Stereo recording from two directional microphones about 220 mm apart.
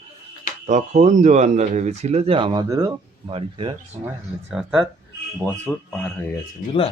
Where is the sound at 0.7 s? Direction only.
30° right (ahead or behind).